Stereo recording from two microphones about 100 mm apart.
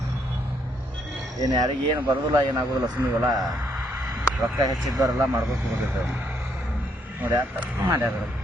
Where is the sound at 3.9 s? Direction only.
30° right (ahead or behind).